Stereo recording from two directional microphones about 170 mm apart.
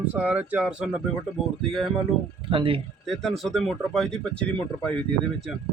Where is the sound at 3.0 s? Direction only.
Centre (ahead or behind).